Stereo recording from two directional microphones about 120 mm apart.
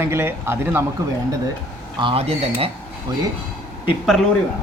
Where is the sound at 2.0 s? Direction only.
50° right (ahead or behind).